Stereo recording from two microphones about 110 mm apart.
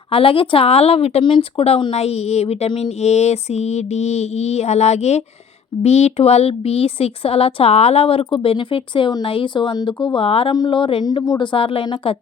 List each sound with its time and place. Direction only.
0.1 s a woman's voice: 55° left (ahead or behind)
3.0 s a sound: 80° left
5.8 s speech: 75° left (ahead or behind); by 10.5 s 55° left (ahead or behind)
10.5 s speech: 45° left (ahead or behind)
11.0 s speech: 35° left (ahead or behind)
11.5 s speech: 55° left (ahead or behind)